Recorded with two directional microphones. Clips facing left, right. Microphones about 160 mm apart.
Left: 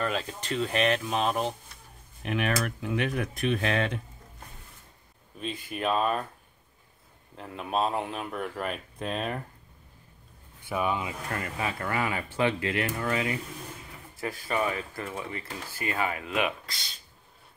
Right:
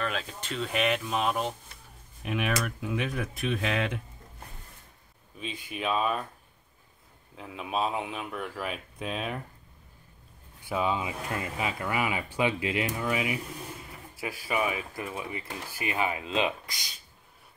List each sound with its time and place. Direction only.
0.0 s speech: centre (ahead or behind)
5.4 s speech: centre (ahead or behind)
7.3 s speech: centre (ahead or behind)
10.7 s speech: 20° right (ahead or behind)